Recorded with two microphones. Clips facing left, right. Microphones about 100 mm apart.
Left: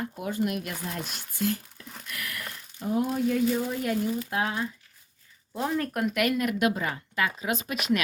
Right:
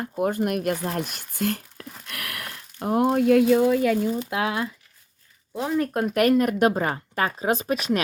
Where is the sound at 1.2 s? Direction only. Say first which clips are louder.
Right 2 dB; 55° right (ahead or behind); by 3.8 s 90° right.